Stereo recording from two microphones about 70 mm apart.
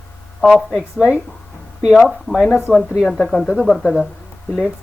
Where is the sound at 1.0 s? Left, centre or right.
Centre.